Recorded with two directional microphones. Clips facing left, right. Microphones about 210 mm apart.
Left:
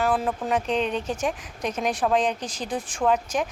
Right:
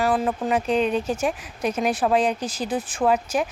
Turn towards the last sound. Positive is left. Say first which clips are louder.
# right 2 dB
turn(degrees=-5)  # may be behind; listen again after turning